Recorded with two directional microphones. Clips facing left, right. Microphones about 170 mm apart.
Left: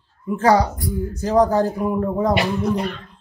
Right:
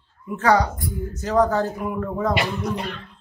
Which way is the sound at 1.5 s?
35° left (ahead or behind).